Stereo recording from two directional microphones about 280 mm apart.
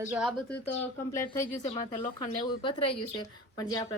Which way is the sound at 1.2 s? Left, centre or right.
Centre.